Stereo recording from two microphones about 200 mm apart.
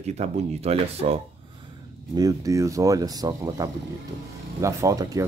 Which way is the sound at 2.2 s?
15° right (ahead or behind).